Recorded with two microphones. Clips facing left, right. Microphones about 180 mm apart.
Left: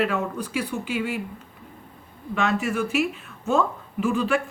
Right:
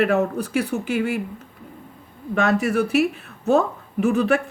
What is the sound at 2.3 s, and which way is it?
Speech, 40° right (ahead or behind).